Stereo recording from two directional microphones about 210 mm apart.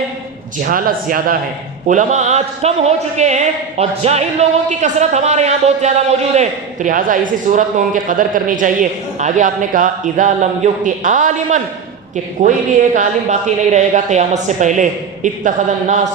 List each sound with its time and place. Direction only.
0.6 s a man's voice: 45° right (ahead or behind)